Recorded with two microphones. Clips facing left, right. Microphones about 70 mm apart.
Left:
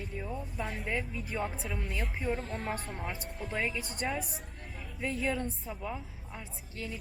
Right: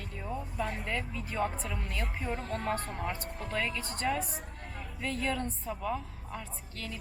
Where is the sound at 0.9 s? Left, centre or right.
Centre.